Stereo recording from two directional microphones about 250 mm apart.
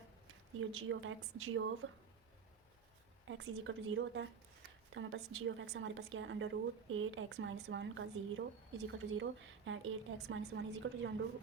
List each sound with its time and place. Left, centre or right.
0.6 s a woman's voice: right
3.2 s a woman's voice: right